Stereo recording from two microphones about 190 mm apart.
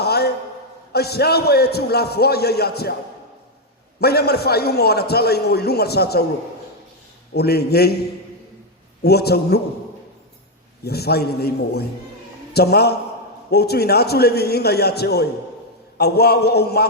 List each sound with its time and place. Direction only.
0.0 s a sound: 55° left (ahead or behind)
0.9 s a man's voice: 55° left (ahead or behind)
4.0 s a man's voice: 55° left (ahead or behind)
7.3 s a man's voice: 55° left (ahead or behind)
9.0 s a man's voice: 55° left (ahead or behind)
10.8 s a man's voice: 55° left (ahead or behind)